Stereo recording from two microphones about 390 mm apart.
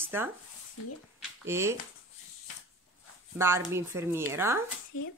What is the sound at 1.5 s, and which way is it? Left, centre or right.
Speech, centre.